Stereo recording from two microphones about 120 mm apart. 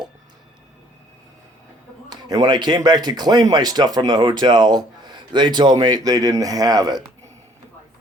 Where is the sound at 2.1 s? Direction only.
35° right (ahead or behind).